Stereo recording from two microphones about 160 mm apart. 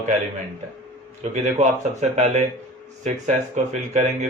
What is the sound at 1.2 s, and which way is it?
A man's voice, 45° right (ahead or behind).